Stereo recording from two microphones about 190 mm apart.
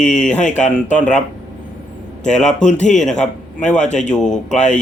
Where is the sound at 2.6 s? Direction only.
40° left (ahead or behind).